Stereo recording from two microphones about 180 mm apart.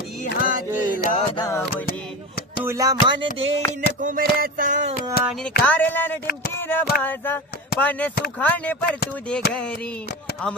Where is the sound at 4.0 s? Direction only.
50° right (ahead or behind).